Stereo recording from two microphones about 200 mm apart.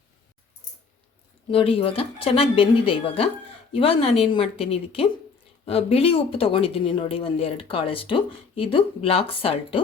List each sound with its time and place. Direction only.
1.5 s speech: 30° left (ahead or behind)